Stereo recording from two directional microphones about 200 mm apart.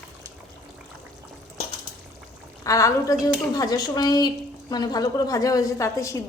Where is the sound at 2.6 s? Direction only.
15° left (ahead or behind).